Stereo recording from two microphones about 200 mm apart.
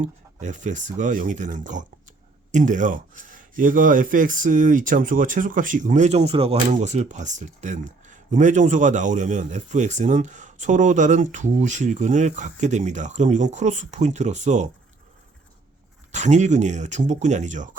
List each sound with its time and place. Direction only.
0.0 s a man's voice: 40° right (ahead or behind)
16.1 s a man's voice: 35° right (ahead or behind)